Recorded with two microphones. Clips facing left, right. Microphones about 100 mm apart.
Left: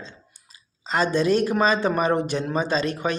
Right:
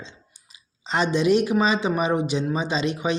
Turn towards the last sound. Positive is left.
turn(degrees=-15)  # may be behind; listen again after turning